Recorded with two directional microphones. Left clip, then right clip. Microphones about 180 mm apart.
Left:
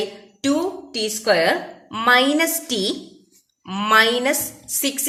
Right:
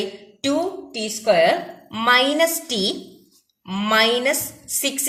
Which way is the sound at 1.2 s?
30° left (ahead or behind).